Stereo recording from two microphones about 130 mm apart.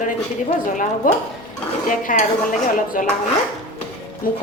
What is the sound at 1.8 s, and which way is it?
Dishes, 90° left.